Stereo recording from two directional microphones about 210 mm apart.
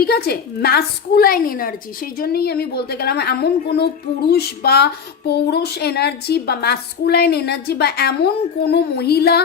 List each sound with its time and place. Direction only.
0.0 s speech: 50° left (ahead or behind)